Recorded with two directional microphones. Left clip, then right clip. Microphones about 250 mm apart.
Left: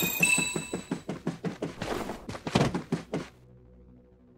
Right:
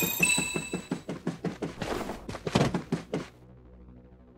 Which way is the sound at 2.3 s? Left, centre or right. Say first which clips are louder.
Even; centre.